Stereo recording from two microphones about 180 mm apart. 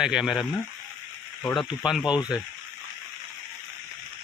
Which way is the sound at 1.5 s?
Centre (ahead or behind).